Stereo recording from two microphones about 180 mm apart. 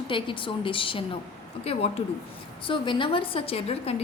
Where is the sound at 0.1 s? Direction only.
30° left (ahead or behind).